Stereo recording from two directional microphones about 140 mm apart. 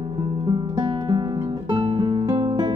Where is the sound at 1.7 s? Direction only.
35° right (ahead or behind).